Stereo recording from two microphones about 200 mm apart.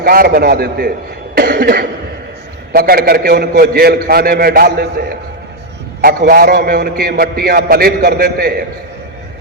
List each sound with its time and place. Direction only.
0.0 s a man's voice: 50° right (ahead or behind)
1.4 s cough: 50° right (ahead or behind)
2.7 s a man's voice: 50° right (ahead or behind)